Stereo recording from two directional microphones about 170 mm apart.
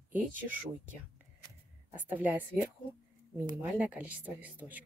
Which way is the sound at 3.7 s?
10° right (ahead or behind).